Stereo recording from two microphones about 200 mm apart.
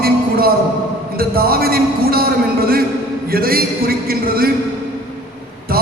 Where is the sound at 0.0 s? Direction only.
50° right (ahead or behind).